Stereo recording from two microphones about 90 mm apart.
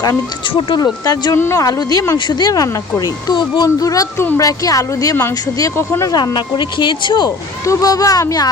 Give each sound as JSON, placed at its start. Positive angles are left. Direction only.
{"t": 0.4, "sound": "speech", "side_deg": 65}
{"t": 1.0, "sound": "speech", "side_deg": 45}
{"t": 1.4, "sound": "speech", "side_deg": 25}
{"t": 1.6, "sound": "speech", "side_deg": 45}
{"t": 2.1, "sound": "speech", "side_deg": 55}
{"t": 3.8, "sound": "speech", "side_deg": 40}
{"t": 5.7, "sound": "speech", "side_deg": 30}
{"t": 6.1, "sound": "speech", "side_deg": 50}
{"t": 7.3, "sound": "speech", "side_deg": 40}